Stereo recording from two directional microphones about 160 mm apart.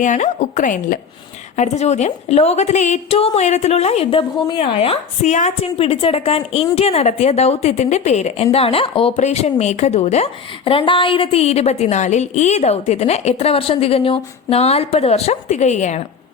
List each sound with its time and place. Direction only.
0.0 s a woman's voice: 50° left (ahead or behind)